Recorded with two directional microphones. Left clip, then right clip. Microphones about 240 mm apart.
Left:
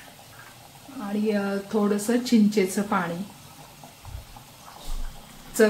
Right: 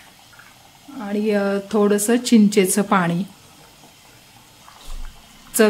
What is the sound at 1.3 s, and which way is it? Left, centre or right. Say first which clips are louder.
Speech: right 7 dB; right.